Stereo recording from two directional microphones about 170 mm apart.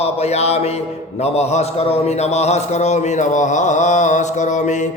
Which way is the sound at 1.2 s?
40° left (ahead or behind).